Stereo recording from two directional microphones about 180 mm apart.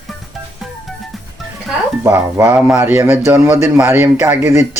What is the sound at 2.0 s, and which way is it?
Speech, 15° right (ahead or behind).